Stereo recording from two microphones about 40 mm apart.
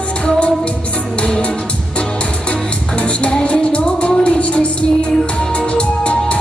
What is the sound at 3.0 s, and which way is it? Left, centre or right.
Music, left.